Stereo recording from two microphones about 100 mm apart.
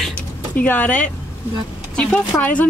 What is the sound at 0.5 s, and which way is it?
Speech, 15° left (ahead or behind).